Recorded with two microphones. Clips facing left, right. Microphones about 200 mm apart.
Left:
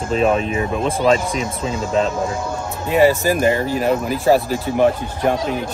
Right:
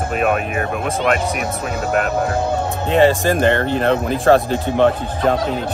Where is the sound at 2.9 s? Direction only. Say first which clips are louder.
Even; 5° left (ahead or behind).